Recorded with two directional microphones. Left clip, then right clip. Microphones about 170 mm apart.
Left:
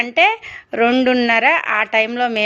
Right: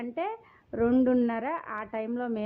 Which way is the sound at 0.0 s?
15° left (ahead or behind).